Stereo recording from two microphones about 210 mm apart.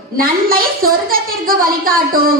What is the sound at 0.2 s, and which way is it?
A child's voice, 45° right (ahead or behind).